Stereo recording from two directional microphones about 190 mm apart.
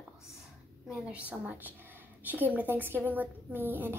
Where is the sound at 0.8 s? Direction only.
5° right (ahead or behind).